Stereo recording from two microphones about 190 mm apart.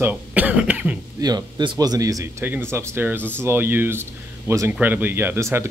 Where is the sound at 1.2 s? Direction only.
20° right (ahead or behind).